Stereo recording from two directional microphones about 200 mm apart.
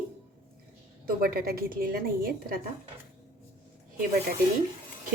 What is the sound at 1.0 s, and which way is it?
A woman's voice, 45° right (ahead or behind).